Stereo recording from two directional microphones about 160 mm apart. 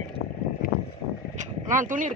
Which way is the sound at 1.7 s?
55° right (ahead or behind).